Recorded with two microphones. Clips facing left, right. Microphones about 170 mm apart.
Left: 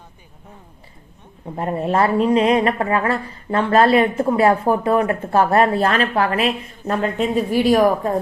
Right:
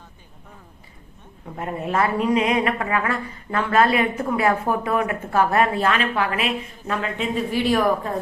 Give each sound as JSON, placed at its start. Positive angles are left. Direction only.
{"t": 1.5, "sound": "speech", "side_deg": 35}